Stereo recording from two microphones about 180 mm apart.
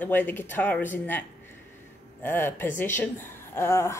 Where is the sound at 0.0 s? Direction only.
10° left (ahead or behind).